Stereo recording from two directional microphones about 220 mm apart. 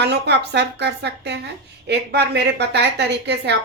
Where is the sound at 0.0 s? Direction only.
50° right (ahead or behind).